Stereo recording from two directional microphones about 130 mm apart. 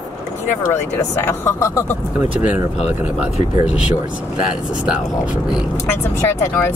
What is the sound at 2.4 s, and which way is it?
Speech, 10° right (ahead or behind).